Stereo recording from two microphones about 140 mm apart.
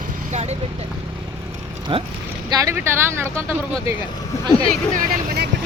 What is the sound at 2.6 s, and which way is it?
Speech, 20° right (ahead or behind).